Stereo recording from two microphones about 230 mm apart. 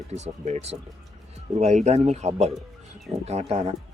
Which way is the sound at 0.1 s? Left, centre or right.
Right.